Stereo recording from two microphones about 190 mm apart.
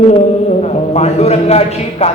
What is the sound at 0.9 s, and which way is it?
Speech, 35° left (ahead or behind).